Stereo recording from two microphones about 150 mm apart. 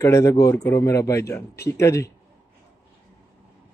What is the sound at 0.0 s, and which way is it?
Speech, 20° left (ahead or behind).